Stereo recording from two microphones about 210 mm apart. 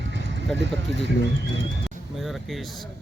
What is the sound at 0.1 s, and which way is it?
Vehicle, 55° right (ahead or behind).